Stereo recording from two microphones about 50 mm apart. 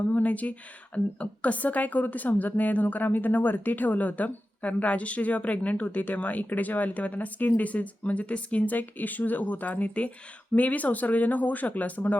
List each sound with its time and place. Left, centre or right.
0.0 s a woman's voice: left